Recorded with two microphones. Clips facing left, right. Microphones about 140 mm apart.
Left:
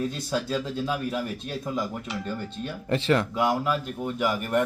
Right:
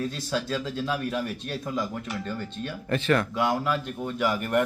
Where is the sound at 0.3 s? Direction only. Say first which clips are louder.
Left 1 dB; 10° left (ahead or behind).